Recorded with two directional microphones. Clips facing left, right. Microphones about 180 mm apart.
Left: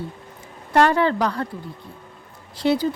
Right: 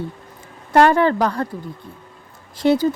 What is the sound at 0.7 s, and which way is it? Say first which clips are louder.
Speech: right 3 dB; 45° right (ahead or behind).